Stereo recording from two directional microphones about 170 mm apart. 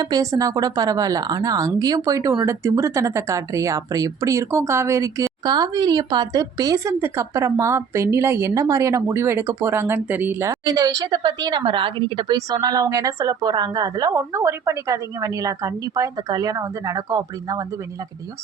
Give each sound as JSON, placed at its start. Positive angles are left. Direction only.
{"t": 0.0, "sound": "speech", "side_deg": -20}
{"t": 10.5, "sound": "speech", "side_deg": -20}